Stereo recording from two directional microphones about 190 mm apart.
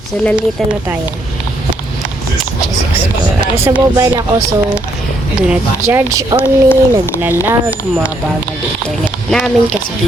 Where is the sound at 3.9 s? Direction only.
20° right (ahead or behind).